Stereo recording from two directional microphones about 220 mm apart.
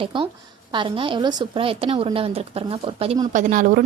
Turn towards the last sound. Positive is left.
turn(degrees=-35)  # may be behind; listen again after turning